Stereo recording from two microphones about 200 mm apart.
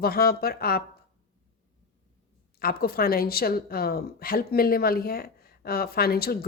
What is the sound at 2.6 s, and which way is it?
A woman's voice, 50° left (ahead or behind).